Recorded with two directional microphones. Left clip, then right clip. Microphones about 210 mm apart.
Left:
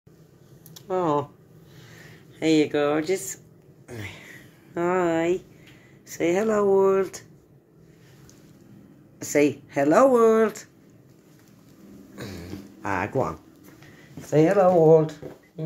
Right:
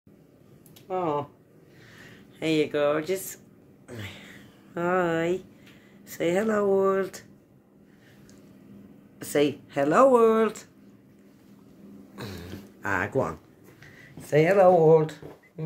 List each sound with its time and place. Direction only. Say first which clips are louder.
0.8 s speech: left 4 dB; 15° left (ahead or behind)
2.0 s speech: left 5 dB; 5° left (ahead or behind)
3.8 s a sound: left 2 dB; centre (ahead or behind)
6.0 s speech: left 2 dB; centre (ahead or behind)
9.2 s speech: left 3 dB; centre (ahead or behind)
12.2 s a sound: left 1 dB; 10° right (ahead or behind)
12.8 s speech: left 1 dB; centre (ahead or behind)